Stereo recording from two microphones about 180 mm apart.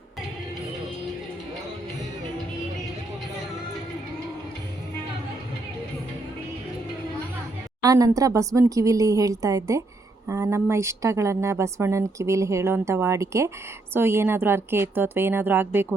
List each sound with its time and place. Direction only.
7.8 s speech: 20° right (ahead or behind)